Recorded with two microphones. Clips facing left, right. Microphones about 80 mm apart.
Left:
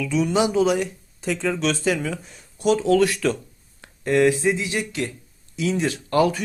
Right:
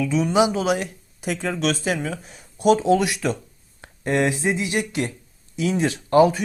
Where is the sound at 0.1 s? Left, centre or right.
Centre.